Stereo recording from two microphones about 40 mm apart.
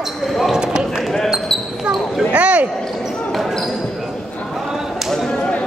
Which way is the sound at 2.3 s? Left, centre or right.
Right.